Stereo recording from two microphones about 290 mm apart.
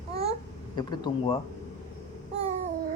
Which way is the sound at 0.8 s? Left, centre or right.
Centre.